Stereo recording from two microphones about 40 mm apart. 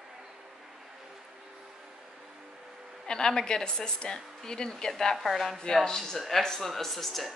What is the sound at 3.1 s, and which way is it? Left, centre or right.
A woman's voice, centre.